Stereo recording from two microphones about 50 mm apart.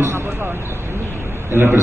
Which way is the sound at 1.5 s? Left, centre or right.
Right.